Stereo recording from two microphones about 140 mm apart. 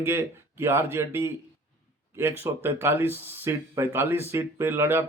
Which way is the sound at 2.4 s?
15° right (ahead or behind).